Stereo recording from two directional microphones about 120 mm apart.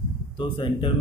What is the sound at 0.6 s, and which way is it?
Speech, 45° left (ahead or behind).